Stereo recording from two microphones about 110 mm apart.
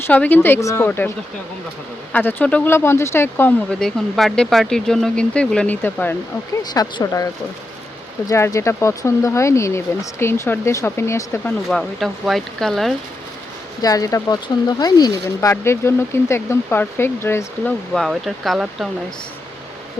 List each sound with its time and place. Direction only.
0.1 s speech: 15° left (ahead or behind)
2.1 s speech: 10° left (ahead or behind)
3.7 s speech: 5° left (ahead or behind)
6.5 s speech: 35° left (ahead or behind)
8.3 s speech: 30° left (ahead or behind)
11.7 s speech: centre (ahead or behind)
13.8 s speech: 30° left (ahead or behind)
17.9 s speech: centre (ahead or behind)